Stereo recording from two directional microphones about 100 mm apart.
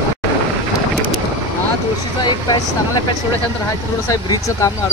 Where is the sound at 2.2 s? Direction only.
45° left (ahead or behind).